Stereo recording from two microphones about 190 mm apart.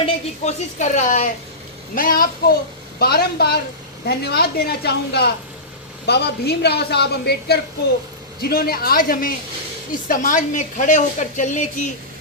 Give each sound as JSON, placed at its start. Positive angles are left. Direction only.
{"t": 0.0, "sound": "a woman's voice", "side_deg": 35}